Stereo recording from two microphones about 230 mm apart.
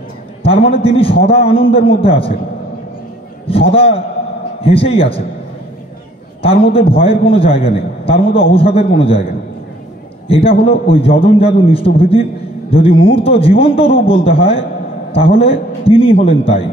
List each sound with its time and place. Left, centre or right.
0.8 s a man's voice: left
3.4 s a man's voice: left
6.4 s a man's voice: left
10.2 s a man's voice: left